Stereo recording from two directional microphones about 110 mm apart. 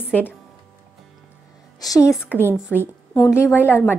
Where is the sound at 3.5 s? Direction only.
20° left (ahead or behind).